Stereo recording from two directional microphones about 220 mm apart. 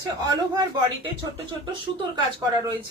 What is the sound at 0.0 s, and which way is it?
Speech, 15° right (ahead or behind).